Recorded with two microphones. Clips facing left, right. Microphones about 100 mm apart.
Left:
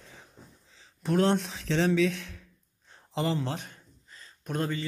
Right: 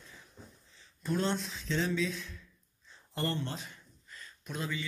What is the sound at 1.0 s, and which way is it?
Speech, 70° left (ahead or behind).